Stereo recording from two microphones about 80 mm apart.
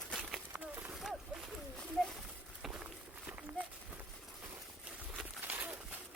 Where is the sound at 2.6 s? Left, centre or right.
Centre.